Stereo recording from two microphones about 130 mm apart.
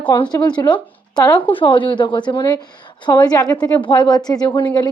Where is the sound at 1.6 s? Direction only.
40° left (ahead or behind).